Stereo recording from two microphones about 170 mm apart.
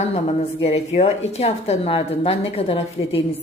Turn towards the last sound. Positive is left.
turn(degrees=35)  # may be behind; listen again after turning